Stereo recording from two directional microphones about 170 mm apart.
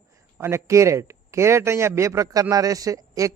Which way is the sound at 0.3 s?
15° right (ahead or behind).